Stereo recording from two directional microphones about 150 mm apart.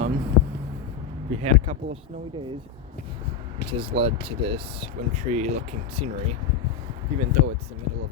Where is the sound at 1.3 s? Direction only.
45° right (ahead or behind).